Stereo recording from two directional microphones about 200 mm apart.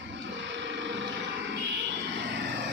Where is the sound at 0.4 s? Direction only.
65° right (ahead or behind).